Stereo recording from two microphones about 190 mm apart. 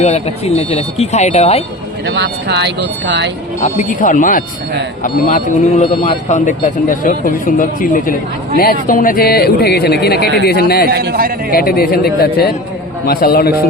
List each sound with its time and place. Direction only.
0.0 s speech: 35° left (ahead or behind)
2.0 s speech: 65° right (ahead or behind)
3.6 s speech: 40° left (ahead or behind); by 10.8 s 55° left (ahead or behind)
10.8 s a man's voice: 55° right (ahead or behind)
11.5 s speech: 50° left (ahead or behind)